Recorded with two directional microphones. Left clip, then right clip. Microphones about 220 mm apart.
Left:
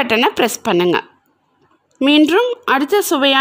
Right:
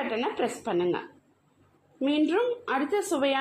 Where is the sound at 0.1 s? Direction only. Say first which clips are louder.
Left 14 dB; 50° left (ahead or behind).